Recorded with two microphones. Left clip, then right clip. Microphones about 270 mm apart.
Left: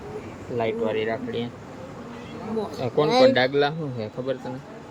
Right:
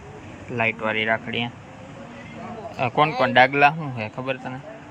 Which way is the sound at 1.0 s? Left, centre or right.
Right.